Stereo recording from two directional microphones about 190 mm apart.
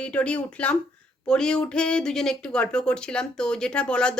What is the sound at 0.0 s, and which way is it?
Speech, 5° left (ahead or behind).